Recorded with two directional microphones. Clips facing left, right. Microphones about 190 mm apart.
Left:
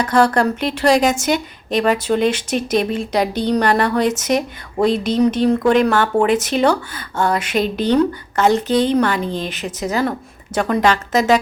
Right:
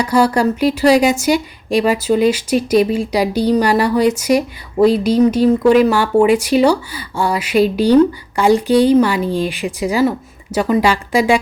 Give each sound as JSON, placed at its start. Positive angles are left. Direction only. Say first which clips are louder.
{"t": 0.0, "sound": "a woman's voice", "louder": "right 1 dB", "side_deg": -10}